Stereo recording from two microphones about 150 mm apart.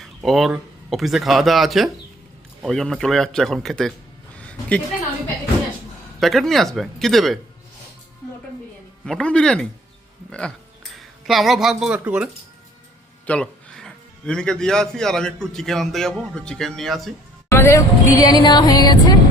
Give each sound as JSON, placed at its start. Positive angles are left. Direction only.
{"t": 0.0, "sound": "a man's voice", "side_deg": 0}
{"t": 4.4, "sound": "a sound", "side_deg": 10}
{"t": 6.1, "sound": "a man's voice", "side_deg": 0}
{"t": 9.0, "sound": "a man's voice", "side_deg": 5}
{"t": 13.2, "sound": "a man's voice", "side_deg": 5}
{"t": 17.5, "sound": "speech", "side_deg": 20}